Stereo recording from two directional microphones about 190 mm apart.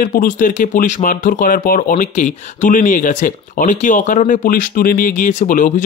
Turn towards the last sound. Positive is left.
turn(degrees=40)  # may be behind; listen again after turning